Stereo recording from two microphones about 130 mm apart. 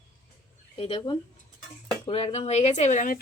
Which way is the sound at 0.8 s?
50° left (ahead or behind).